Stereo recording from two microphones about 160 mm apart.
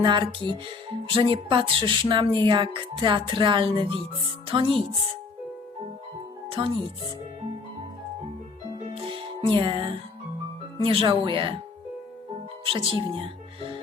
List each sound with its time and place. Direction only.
0.0 s speech: 30° right (ahead or behind)
6.5 s speech: 35° right (ahead or behind)
9.5 s speech: 30° right (ahead or behind)
12.6 s speech: 30° right (ahead or behind)